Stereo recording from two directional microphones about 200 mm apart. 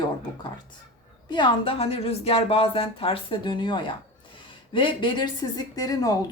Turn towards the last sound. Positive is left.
turn(degrees=20)  # may be behind; listen again after turning